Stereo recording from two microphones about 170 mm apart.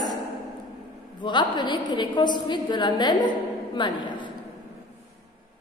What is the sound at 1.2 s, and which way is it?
A woman's voice, 25° left (ahead or behind).